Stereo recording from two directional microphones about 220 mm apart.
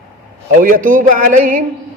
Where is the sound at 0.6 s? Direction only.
40° right (ahead or behind).